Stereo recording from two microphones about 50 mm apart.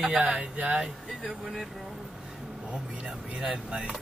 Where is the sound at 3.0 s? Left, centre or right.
Centre.